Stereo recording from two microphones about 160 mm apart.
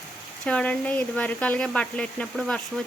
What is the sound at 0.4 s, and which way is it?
Speech, 5° left (ahead or behind).